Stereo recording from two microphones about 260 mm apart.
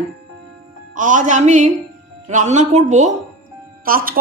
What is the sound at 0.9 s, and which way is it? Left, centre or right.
Speech, right.